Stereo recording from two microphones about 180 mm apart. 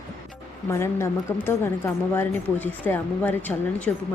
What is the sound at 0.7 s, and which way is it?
Speech, 15° left (ahead or behind).